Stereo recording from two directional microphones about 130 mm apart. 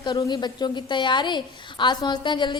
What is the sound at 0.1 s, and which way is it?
A woman's voice, 35° left (ahead or behind).